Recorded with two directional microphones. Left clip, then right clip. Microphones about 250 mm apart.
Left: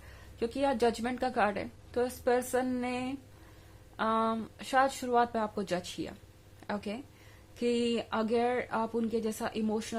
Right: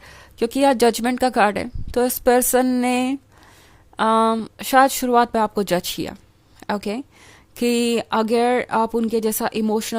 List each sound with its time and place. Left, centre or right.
0.0 s speech: right